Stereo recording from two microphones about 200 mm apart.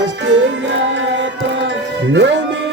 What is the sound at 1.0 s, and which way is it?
Music, 65° right (ahead or behind).